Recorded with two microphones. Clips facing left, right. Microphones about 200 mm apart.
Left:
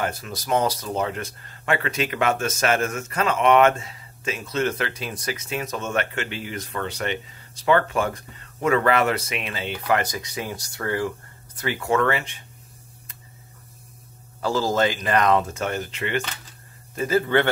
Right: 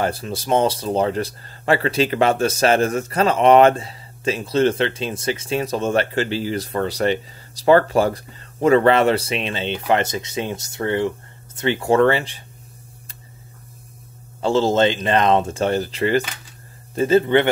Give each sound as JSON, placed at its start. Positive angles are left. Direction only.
{"t": 0.0, "sound": "speech", "side_deg": -30}
{"t": 14.4, "sound": "speech", "side_deg": -25}